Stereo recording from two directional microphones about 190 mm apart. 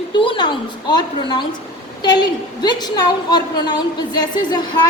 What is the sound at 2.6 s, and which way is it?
A woman's voice, 20° left (ahead or behind).